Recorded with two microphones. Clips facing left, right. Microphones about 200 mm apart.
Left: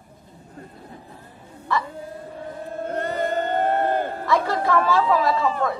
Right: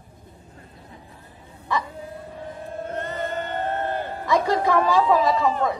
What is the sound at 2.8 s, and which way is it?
Male singing, 35° left (ahead or behind).